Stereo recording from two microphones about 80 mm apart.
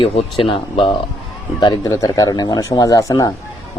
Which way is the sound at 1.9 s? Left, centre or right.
Left.